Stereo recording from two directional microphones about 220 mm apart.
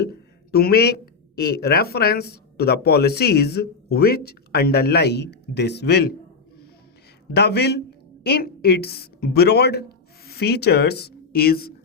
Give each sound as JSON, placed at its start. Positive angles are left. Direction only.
{"t": 0.0, "sound": "speech", "side_deg": 45}
{"t": 7.3, "sound": "a woman's voice", "side_deg": 50}